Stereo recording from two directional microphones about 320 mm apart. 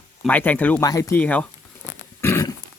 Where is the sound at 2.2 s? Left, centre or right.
Centre.